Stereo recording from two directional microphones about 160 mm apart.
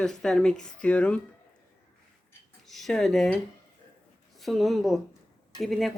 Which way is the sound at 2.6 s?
Centre (ahead or behind).